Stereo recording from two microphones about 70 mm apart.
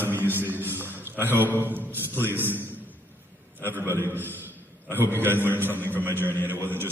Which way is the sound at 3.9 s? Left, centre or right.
Right.